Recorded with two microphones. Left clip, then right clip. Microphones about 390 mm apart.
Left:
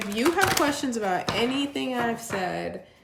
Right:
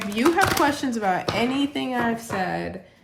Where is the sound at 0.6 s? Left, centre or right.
Centre.